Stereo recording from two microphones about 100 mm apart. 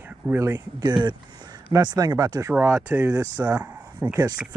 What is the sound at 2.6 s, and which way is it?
Speech, 15° right (ahead or behind).